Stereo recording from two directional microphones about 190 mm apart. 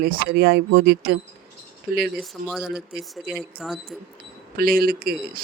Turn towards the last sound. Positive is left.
turn(degrees=-50)  # may be behind; listen again after turning